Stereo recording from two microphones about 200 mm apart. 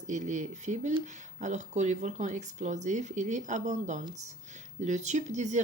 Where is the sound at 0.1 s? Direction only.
35° right (ahead or behind).